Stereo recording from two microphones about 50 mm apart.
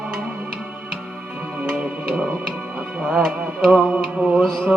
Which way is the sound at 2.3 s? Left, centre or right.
Right.